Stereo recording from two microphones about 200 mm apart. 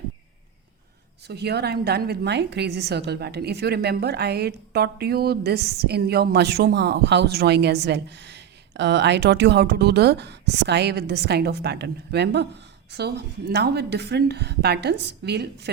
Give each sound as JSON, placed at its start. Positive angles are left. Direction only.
{"t": 1.3, "sound": "a woman's voice", "side_deg": -55}